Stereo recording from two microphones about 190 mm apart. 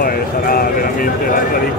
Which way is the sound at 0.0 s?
50° left (ahead or behind).